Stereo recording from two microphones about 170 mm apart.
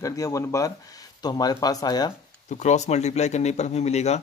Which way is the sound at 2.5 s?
45° left (ahead or behind).